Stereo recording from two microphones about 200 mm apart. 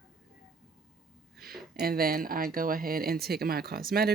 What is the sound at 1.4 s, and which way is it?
Speech, 50° right (ahead or behind).